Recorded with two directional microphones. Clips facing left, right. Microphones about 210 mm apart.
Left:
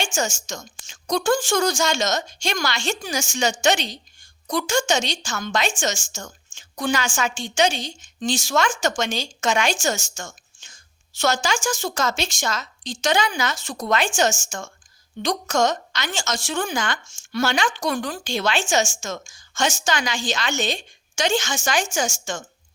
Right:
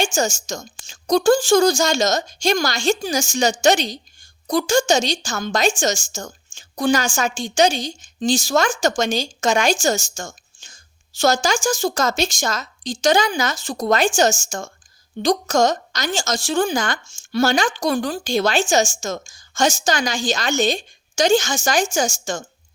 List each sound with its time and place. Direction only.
0.0 s a woman's voice: 40° right (ahead or behind)